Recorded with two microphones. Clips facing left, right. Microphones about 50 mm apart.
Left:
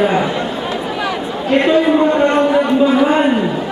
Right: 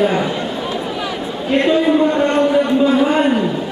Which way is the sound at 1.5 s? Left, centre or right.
Centre.